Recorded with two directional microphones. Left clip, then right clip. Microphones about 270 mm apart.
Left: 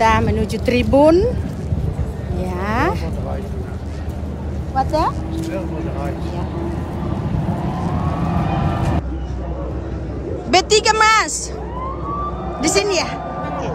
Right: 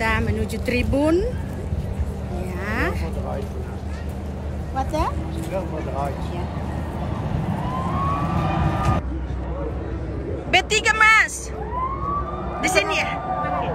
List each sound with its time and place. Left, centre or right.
0.0 s speech: centre
2.6 s a sound: centre
4.7 s speech: centre
10.5 s speech: centre
12.5 s speech: centre